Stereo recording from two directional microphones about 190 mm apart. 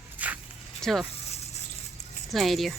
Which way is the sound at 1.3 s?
35° left (ahead or behind).